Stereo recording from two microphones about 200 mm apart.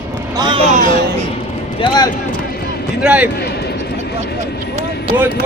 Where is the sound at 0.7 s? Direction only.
40° right (ahead or behind).